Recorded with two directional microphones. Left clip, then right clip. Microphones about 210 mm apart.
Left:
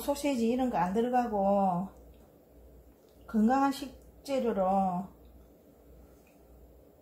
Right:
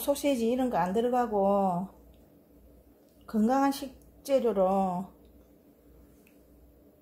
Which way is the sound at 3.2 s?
45° right (ahead or behind).